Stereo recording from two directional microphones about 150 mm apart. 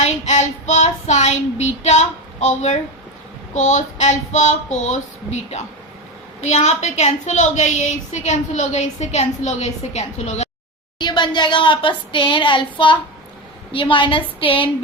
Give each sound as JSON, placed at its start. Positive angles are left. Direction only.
{"t": 0.0, "sound": "a woman's voice", "side_deg": 50}
{"t": 10.9, "sound": "speech", "side_deg": 30}